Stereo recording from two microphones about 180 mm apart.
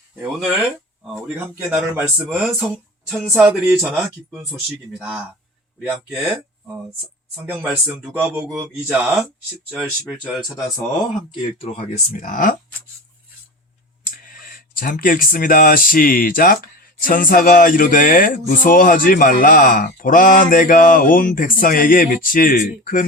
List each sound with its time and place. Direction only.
0.2 s speech: 10° right (ahead or behind)
2.2 s speech: 5° right (ahead or behind)
12.1 s music: 50° left (ahead or behind)
14.1 s speech: 50° left (ahead or behind)
17.0 s music: 50° left (ahead or behind)